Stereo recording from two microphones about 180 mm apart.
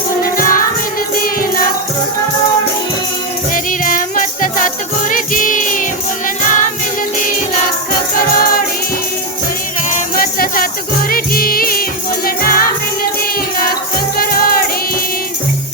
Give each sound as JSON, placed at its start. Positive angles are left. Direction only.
{"t": 0.2, "sound": "music", "side_deg": 50}
{"t": 3.5, "sound": "music", "side_deg": 50}
{"t": 9.9, "sound": "music", "side_deg": 55}
{"t": 14.2, "sound": "music", "side_deg": 55}